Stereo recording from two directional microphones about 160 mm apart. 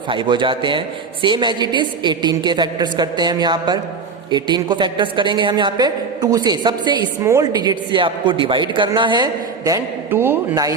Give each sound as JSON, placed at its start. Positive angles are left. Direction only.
{"t": 0.1, "sound": "a woman's voice", "side_deg": -30}